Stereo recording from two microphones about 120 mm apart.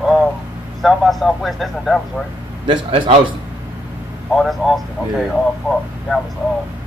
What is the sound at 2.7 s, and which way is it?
Speech, 50° right (ahead or behind).